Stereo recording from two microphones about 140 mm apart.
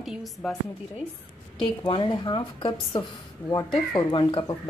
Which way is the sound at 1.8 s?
35° left (ahead or behind).